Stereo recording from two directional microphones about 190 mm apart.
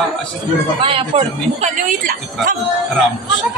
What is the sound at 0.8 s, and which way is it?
Speech, 30° right (ahead or behind).